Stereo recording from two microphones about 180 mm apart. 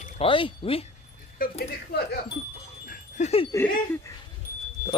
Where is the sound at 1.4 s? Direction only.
60° left (ahead or behind).